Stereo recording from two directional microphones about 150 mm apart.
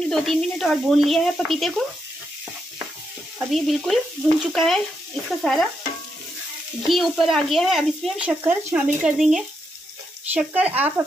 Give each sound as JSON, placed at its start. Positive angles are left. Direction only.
{"t": 0.0, "sound": "speech", "side_deg": 0}
{"t": 3.3, "sound": "speech", "side_deg": 0}
{"t": 6.9, "sound": "speech", "side_deg": 0}